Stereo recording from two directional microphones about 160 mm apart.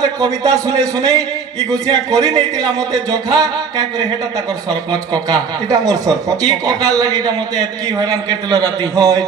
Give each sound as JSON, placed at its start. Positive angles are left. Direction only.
{"t": 0.0, "sound": "speech", "side_deg": -25}